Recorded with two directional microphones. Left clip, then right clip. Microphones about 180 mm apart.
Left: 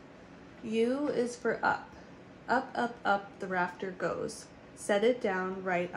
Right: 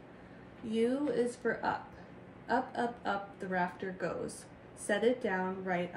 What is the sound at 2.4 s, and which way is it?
A woman's voice, 35° left (ahead or behind).